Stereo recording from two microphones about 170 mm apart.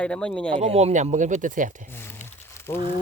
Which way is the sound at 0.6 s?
40° right (ahead or behind).